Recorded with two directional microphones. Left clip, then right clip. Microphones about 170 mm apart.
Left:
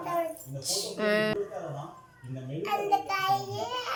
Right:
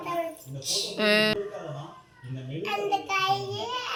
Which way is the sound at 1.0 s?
20° right (ahead or behind).